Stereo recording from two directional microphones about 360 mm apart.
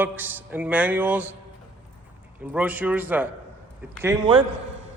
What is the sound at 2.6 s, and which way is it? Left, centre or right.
A man's voice, centre.